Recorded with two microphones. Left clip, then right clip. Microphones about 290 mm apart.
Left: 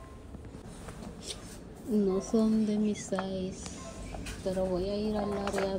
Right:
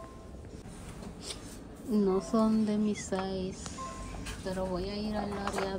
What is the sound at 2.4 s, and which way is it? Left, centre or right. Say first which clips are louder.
Speech: even; centre.